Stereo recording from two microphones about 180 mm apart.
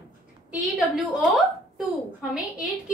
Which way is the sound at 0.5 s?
Centre (ahead or behind).